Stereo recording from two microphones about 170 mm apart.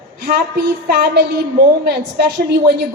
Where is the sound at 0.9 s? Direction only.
70° right (ahead or behind).